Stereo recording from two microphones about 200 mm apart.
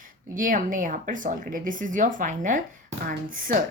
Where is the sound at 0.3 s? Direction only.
40° right (ahead or behind).